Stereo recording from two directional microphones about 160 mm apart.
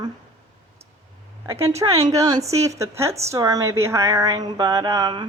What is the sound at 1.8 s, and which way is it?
Speech, 35° right (ahead or behind).